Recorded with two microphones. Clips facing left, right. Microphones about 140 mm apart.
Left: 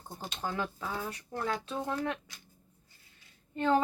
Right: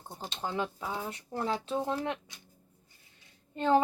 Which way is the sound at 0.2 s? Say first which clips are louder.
Right 1 dB; 25° right (ahead or behind).